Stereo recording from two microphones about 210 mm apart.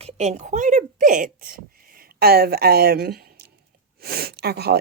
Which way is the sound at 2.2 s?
50° right (ahead or behind).